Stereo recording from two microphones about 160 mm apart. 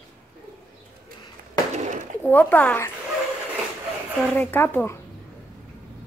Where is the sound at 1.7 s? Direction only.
50° right (ahead or behind).